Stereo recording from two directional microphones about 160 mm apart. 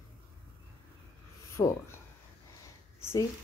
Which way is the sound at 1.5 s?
15° left (ahead or behind).